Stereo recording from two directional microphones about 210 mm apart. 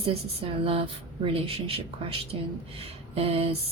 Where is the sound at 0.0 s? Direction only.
25° right (ahead or behind).